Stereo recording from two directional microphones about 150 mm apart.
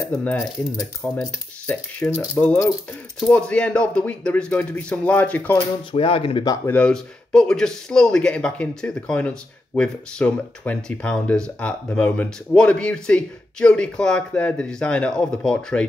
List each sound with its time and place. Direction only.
0.2 s a man's voice: 10° left (ahead or behind)
5.9 s speech: 40° left (ahead or behind)
6.4 s speech: 20° left (ahead or behind)
6.7 s a man's voice: 5° left (ahead or behind)